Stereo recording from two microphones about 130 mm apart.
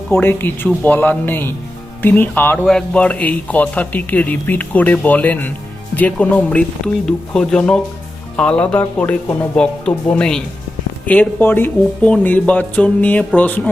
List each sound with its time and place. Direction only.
0.1 s speech: 15° left (ahead or behind)